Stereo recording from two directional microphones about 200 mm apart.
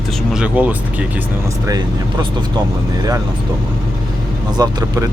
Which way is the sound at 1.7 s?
20° right (ahead or behind).